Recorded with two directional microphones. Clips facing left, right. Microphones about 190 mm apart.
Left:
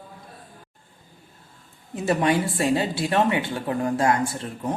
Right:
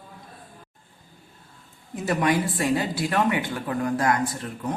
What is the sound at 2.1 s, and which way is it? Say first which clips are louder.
Speech: left 1 dB; 30° left (ahead or behind).